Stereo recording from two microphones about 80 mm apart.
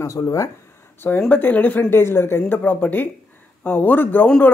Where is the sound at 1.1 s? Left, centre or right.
Centre.